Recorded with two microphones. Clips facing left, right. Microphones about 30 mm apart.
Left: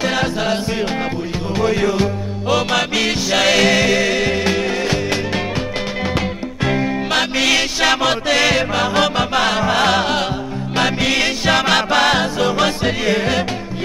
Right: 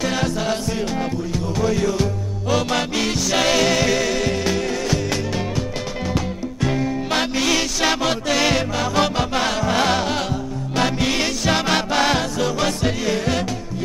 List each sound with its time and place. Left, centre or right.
0.0 s music: left